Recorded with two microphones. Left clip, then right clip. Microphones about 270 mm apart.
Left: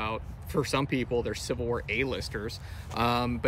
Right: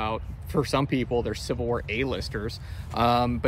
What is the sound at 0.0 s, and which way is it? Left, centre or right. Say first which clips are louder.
Speech: right 4 dB; centre.